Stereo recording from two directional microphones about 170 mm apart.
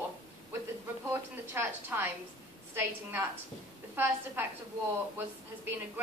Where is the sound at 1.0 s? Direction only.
10° right (ahead or behind).